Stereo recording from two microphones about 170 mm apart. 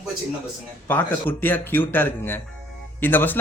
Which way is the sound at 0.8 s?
10° left (ahead or behind).